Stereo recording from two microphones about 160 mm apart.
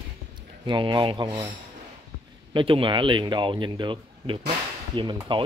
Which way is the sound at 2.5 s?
30° right (ahead or behind).